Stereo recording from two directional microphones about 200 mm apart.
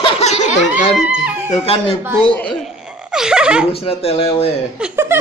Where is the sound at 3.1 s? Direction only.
5° right (ahead or behind).